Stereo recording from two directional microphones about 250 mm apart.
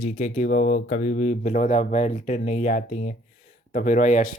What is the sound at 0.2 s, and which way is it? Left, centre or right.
Speech, left.